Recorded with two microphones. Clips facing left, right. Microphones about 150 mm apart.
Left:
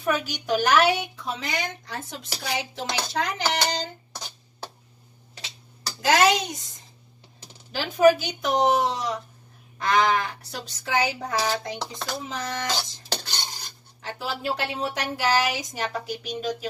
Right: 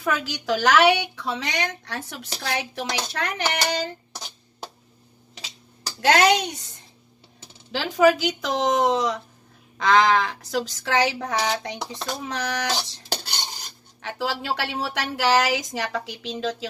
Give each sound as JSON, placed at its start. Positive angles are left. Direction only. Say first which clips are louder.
{"t": 0.0, "sound": "a woman's voice", "louder": "even", "side_deg": -90}
{"t": 5.9, "sound": "a woman's voice", "louder": "right 2 dB", "side_deg": -65}
{"t": 7.7, "sound": "a sound", "louder": "even", "side_deg": -90}
{"t": 12.2, "sound": "a woman's voice", "louder": "right 4 dB", "side_deg": -75}
{"t": 14.0, "sound": "a woman's voice", "louder": "right 2 dB", "side_deg": -75}